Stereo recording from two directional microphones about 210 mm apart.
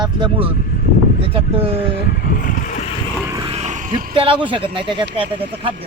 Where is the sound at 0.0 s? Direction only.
25° right (ahead or behind).